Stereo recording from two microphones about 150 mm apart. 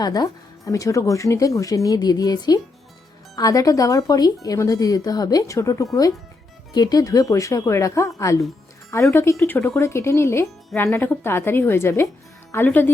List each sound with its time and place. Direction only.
0.0 s a woman's voice: 25° left (ahead or behind)